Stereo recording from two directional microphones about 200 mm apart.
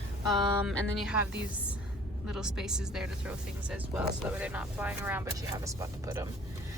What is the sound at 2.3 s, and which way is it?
A woman's voice, 5° right (ahead or behind).